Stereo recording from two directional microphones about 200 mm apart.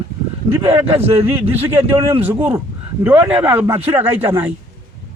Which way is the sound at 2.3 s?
25° right (ahead or behind).